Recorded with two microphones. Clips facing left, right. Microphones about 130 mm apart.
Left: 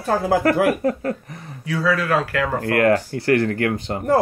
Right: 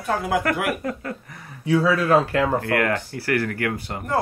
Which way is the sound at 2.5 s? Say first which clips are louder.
Left 5 dB; 35° left (ahead or behind).